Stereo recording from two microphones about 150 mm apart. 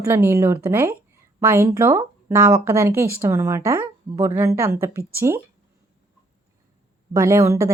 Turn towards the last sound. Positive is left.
turn(degrees=-20)  # may be behind; listen again after turning